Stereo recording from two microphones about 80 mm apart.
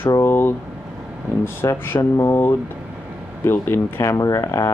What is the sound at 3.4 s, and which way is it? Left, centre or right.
Speech, left.